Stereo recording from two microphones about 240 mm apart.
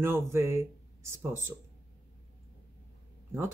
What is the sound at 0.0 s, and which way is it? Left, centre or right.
Speech, centre.